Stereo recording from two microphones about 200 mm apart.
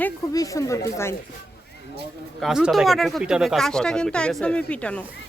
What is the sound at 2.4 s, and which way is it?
Speech, centre (ahead or behind).